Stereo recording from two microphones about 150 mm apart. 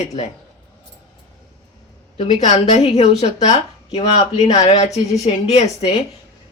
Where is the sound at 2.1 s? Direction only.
45° left (ahead or behind).